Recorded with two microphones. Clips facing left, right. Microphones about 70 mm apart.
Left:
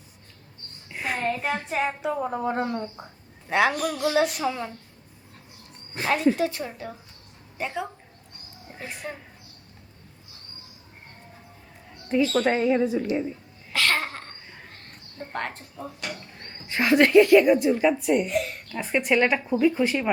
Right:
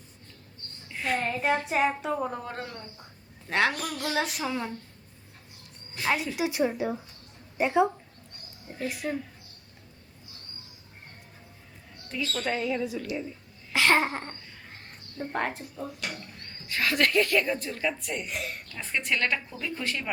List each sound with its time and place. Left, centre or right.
0.9 s a sound: centre
1.2 s female singing: centre
2.5 s speech: left
3.5 s female singing: centre
6.0 s a woman's voice: left
6.3 s speech: centre
7.6 s a sound: centre
8.7 s speech: left
12.0 s a woman's voice: left
13.7 s a sound: right
15.2 s female singing: centre
16.4 s speech: left
18.3 s female singing: centre
18.7 s speech: centre